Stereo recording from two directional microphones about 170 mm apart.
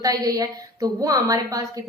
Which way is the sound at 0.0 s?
20° right (ahead or behind).